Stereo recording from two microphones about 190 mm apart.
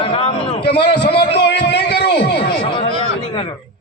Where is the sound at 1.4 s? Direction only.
60° left (ahead or behind).